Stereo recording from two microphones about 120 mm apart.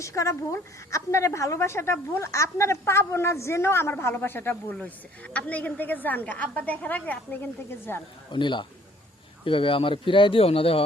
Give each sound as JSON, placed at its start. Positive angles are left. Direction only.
{"t": 0.0, "sound": "a woman's voice", "side_deg": 25}
{"t": 8.3, "sound": "a man's voice", "side_deg": 40}